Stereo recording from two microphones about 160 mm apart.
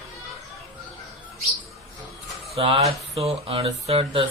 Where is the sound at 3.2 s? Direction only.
40° right (ahead or behind).